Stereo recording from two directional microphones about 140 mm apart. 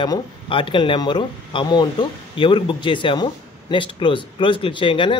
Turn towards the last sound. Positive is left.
turn(degrees=40)  # may be behind; listen again after turning